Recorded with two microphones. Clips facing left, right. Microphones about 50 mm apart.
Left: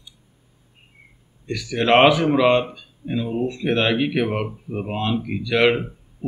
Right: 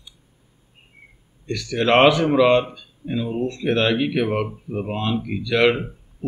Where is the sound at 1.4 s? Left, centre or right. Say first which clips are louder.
Even; centre.